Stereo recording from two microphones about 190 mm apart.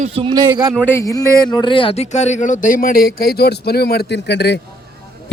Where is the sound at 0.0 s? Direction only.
30° right (ahead or behind).